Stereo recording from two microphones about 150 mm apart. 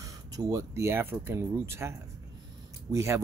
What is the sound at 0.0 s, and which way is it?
Speech, 20° right (ahead or behind).